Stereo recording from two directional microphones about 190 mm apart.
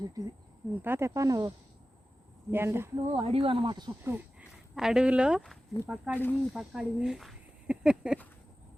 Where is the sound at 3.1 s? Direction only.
30° right (ahead or behind).